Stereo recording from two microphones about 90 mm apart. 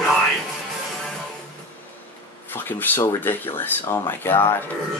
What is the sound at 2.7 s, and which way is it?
Speech, 20° left (ahead or behind).